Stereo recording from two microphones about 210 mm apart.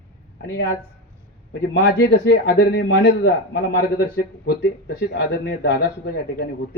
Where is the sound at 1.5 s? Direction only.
50° left (ahead or behind).